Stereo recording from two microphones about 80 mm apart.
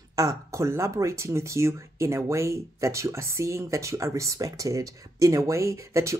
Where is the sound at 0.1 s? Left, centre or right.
Right.